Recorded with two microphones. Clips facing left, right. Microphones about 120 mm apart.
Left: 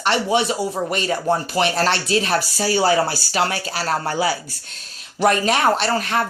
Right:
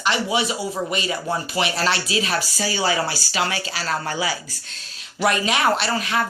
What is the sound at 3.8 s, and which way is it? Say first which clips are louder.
Speech: left 5 dB; 35° left (ahead or behind).